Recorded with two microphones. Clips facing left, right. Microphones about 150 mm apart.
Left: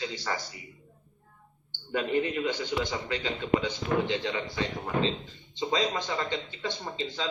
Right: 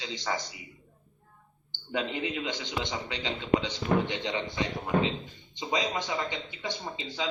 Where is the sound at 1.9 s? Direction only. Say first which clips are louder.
Left 4 dB; 15° right (ahead or behind).